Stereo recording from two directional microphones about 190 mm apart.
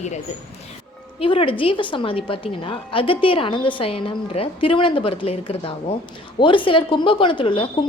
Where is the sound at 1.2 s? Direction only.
30° left (ahead or behind).